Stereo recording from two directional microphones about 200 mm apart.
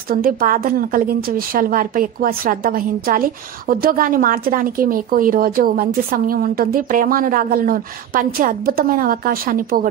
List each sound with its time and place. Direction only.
0.1 s a woman's voice: 45° right (ahead or behind)